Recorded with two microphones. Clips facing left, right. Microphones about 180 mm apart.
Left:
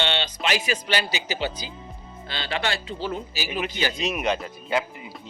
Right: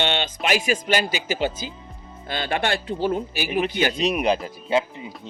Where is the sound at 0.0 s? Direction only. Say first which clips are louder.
Right 2 dB; 45° right (ahead or behind).